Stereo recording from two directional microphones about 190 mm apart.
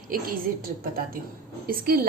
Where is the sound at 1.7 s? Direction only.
50° right (ahead or behind).